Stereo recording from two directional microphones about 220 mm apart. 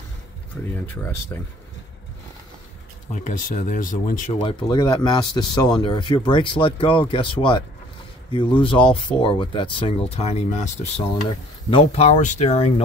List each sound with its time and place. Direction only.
3.1 s speech: 35° left (ahead or behind)
4.4 s speech: 20° left (ahead or behind)